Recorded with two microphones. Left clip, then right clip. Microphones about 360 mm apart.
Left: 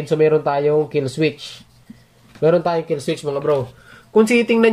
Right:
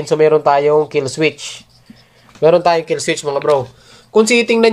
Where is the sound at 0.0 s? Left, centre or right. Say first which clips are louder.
Right 4 dB; centre.